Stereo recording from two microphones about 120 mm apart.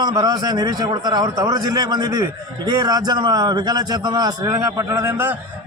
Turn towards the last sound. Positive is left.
turn(degrees=-20)  # may be behind; listen again after turning